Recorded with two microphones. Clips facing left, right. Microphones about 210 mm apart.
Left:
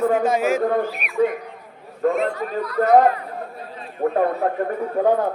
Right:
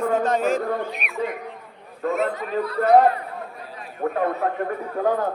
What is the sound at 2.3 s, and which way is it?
Speech, 30° right (ahead or behind).